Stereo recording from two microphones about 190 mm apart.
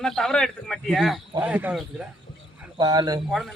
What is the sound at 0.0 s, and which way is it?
Speech, 5° left (ahead or behind).